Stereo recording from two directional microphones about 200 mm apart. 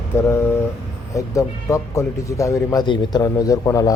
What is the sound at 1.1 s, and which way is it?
Speech, 15° left (ahead or behind).